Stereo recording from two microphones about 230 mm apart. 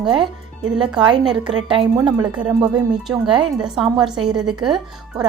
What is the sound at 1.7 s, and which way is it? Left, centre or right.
Speech, right.